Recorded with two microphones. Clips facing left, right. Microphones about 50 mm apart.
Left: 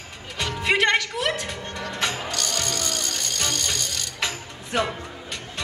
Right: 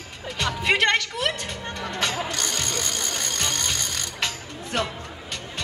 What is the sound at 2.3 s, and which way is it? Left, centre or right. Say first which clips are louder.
Music: even; right.